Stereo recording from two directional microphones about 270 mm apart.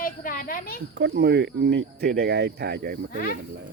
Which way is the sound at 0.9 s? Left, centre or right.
Right.